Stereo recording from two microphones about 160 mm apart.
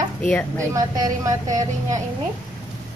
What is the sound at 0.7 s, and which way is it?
Speech, 20° right (ahead or behind).